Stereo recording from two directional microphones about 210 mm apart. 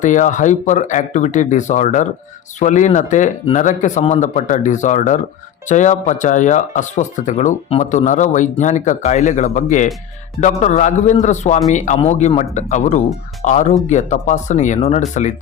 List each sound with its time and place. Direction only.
0.0 s speech: 35° left (ahead or behind)